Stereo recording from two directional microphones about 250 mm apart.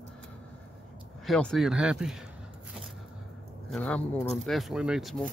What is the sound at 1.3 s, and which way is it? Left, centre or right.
Speech, centre.